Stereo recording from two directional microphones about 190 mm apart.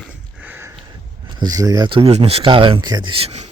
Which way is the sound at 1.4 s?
20° right (ahead or behind).